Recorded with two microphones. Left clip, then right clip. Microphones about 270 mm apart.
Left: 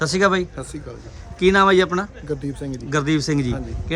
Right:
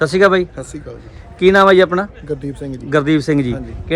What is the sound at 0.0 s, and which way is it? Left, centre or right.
Speech, centre.